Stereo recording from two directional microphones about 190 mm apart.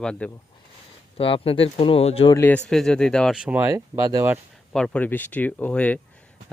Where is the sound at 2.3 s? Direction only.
10° left (ahead or behind).